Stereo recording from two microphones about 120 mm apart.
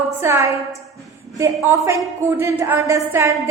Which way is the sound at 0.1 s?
20° right (ahead or behind).